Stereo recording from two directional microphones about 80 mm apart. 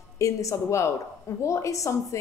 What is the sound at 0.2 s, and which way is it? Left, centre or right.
A woman's voice, left.